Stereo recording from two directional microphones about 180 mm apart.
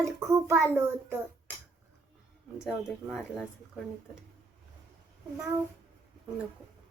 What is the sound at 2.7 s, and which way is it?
Speech, centre (ahead or behind).